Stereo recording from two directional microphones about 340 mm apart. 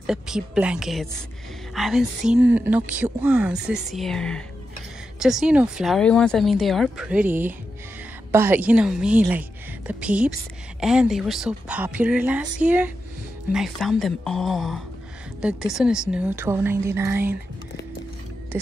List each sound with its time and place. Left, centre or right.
0.0 s a woman's voice: centre